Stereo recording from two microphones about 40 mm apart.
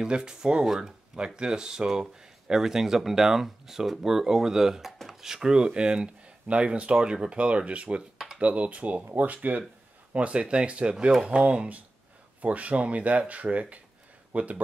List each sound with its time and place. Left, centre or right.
0.0 s speech: centre; by 9.6 s right
10.1 s speech: right